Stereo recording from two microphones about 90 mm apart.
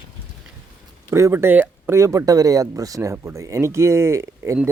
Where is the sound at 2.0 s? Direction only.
35° right (ahead or behind).